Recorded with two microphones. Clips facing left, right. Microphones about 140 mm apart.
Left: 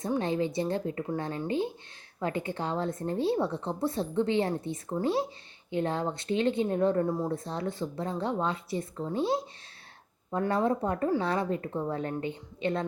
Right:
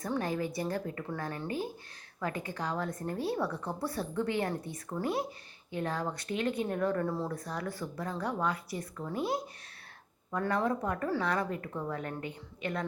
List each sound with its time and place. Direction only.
0.0 s speech: 25° left (ahead or behind)